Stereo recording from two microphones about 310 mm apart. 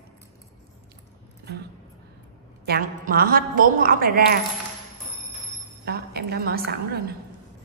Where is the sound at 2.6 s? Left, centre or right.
Right.